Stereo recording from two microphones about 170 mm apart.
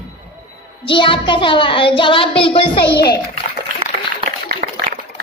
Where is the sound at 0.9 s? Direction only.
30° left (ahead or behind).